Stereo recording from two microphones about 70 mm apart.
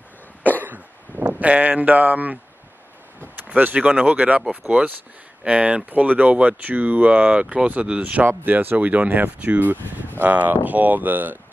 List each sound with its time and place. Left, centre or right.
1.4 s speech: right
3.4 s speech: right